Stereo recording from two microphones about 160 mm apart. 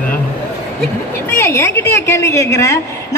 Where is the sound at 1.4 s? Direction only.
15° left (ahead or behind).